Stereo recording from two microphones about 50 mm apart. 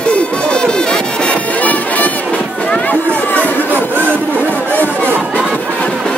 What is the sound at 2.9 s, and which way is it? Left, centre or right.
Run, left.